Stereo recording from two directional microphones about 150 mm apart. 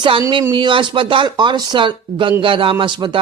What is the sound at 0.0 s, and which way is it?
Speech, 35° right (ahead or behind).